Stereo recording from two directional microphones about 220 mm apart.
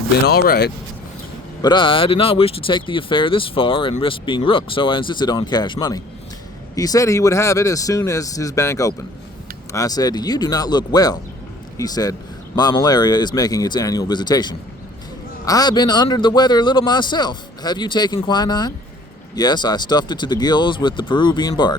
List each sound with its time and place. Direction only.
0.3 s speech: 45° left (ahead or behind)
1.6 s speech: 20° left (ahead or behind)